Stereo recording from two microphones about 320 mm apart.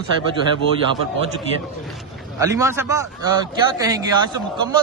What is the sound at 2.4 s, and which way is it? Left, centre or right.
A man's voice, centre.